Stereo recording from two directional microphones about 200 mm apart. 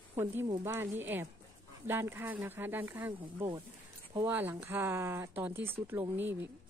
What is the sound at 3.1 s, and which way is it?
Speech, 25° right (ahead or behind).